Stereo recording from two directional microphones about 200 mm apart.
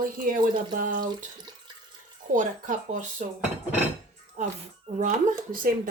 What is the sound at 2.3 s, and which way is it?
Speech, 40° right (ahead or behind).